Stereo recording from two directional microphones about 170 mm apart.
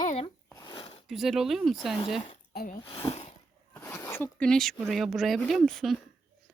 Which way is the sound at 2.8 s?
35° left (ahead or behind).